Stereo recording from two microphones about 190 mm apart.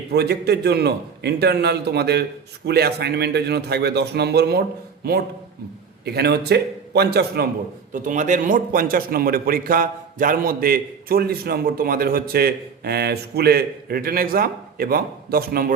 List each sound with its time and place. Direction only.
0.1 s a man's voice: 60° right (ahead or behind)
6.1 s a man's voice: 60° right (ahead or behind)
7.9 s a man's voice: 40° right (ahead or behind)